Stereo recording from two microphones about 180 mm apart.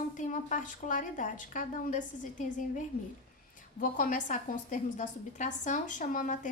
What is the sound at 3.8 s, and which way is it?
A woman's voice, 50° left (ahead or behind).